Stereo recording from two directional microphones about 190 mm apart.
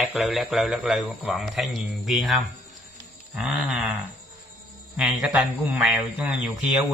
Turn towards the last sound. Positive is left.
turn(degrees=-10)  # may be behind; listen again after turning